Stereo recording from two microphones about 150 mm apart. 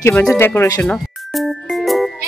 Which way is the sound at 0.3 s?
15° left (ahead or behind).